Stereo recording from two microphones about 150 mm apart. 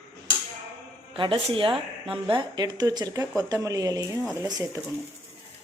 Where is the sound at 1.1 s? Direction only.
35° right (ahead or behind).